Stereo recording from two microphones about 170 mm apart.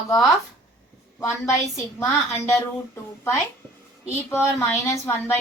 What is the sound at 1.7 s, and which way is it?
A woman's voice, 15° left (ahead or behind).